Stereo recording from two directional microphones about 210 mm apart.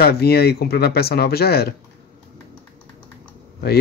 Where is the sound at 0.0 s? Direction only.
50° left (ahead or behind).